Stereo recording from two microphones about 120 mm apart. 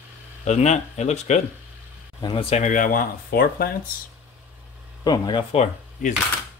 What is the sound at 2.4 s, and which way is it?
Speech, 65° left (ahead or behind).